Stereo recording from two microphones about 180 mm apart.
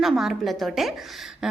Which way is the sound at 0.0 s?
Centre (ahead or behind).